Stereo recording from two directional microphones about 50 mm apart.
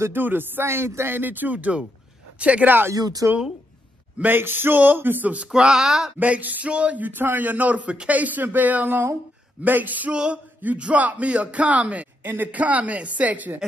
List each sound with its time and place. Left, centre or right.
0.1 s speech: right
1.1 s a man's voice: right
3.2 s speech: right
4.2 s speech: right
5.5 s speech: centre
6.1 s speech: right
7.1 s a man's voice: right
10.1 s a man's voice: centre